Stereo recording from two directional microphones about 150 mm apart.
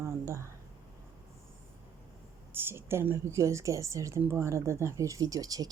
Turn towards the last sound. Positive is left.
turn(degrees=-25)  # may be behind; listen again after turning